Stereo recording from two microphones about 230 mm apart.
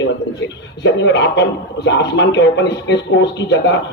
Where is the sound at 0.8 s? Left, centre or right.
Left.